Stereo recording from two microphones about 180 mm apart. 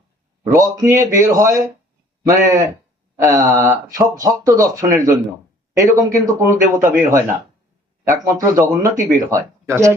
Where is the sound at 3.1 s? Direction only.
15° right (ahead or behind).